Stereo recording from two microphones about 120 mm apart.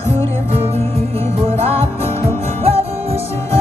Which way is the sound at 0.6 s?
55° right (ahead or behind).